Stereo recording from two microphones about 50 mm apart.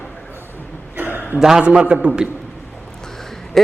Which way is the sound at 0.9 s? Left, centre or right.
Right.